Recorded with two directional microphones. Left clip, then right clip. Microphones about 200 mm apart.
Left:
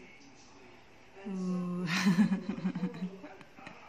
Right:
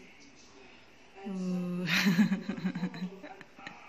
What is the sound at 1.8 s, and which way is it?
Speech, 5° right (ahead or behind).